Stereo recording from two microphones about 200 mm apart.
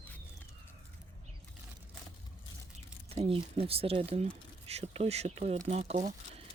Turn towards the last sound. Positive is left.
turn(degrees=-30)  # may be behind; listen again after turning